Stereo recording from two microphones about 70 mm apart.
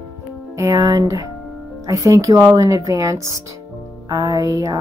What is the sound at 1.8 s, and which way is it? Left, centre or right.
Speech, right.